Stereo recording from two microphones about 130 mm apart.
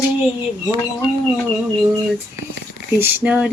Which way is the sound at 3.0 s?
15° right (ahead or behind).